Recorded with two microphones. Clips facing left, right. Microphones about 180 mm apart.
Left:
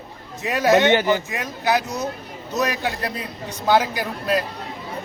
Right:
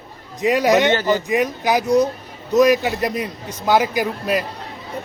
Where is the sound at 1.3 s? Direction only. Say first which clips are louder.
Right 4 dB; 15° right (ahead or behind).